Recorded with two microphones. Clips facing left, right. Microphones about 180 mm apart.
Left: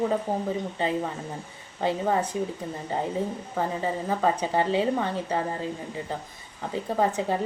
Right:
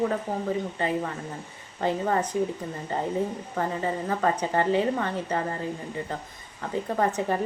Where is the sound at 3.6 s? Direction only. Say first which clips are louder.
Even; 10° left (ahead or behind).